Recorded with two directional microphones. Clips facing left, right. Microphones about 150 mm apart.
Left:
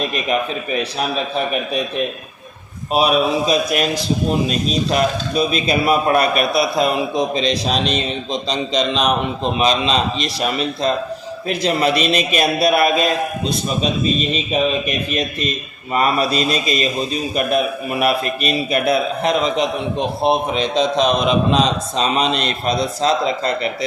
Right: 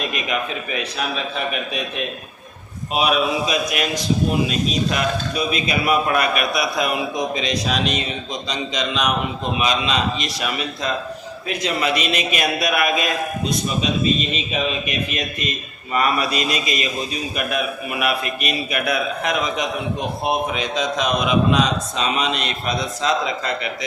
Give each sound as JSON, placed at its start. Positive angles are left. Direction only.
{"t": 0.1, "sound": "a man's voice", "side_deg": 35}
{"t": 2.9, "sound": "a man's voice", "side_deg": 35}
{"t": 15.9, "sound": "a man's voice", "side_deg": 30}
{"t": 18.0, "sound": "a man's voice", "side_deg": 35}